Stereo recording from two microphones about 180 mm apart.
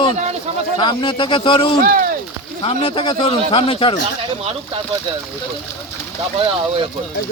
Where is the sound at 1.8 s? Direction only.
55° right (ahead or behind).